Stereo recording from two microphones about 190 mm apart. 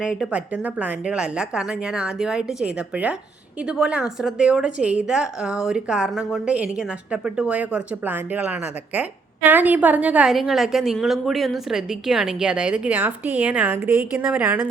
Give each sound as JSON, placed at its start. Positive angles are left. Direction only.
{"t": 0.0, "sound": "a woman's voice", "side_deg": 0}